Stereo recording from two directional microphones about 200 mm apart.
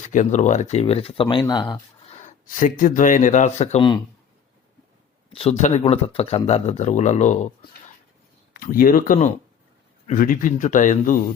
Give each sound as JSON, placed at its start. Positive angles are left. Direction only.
{"t": 0.1, "sound": "speech", "side_deg": 40}
{"t": 2.1, "sound": "speech", "side_deg": 40}
{"t": 5.3, "sound": "speech", "side_deg": 30}